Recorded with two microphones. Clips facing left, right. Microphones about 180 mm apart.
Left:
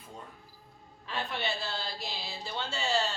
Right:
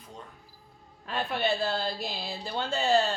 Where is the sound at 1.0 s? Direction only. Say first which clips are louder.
Right 6 dB; 50° right (ahead or behind).